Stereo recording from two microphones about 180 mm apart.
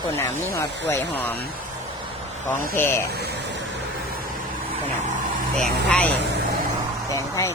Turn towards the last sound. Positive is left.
turn(degrees=20)  # may be behind; listen again after turning